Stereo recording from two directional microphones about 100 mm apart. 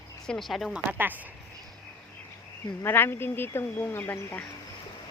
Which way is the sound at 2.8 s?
25° left (ahead or behind).